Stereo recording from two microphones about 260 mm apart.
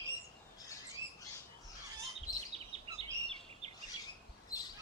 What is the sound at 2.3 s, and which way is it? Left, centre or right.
Bird, left.